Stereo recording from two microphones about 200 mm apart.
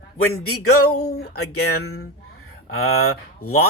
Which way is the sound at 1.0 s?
55° left (ahead or behind).